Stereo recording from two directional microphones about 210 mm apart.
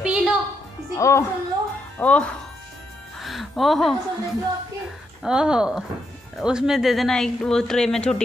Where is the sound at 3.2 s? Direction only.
Centre (ahead or behind).